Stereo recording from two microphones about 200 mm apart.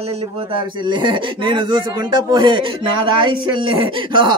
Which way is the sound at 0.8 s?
25° right (ahead or behind).